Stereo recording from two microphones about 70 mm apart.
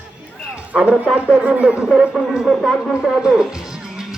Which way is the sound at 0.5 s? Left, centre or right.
Centre.